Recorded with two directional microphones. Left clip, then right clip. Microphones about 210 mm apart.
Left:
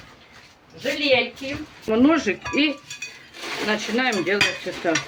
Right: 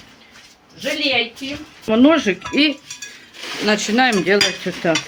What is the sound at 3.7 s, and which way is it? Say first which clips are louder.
Speech: right 7 dB; 55° right (ahead or behind).